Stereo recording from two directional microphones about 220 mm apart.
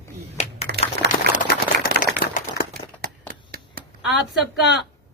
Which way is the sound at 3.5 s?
45° right (ahead or behind).